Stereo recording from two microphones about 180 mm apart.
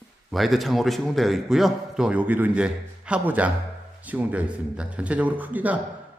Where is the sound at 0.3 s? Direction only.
Centre (ahead or behind).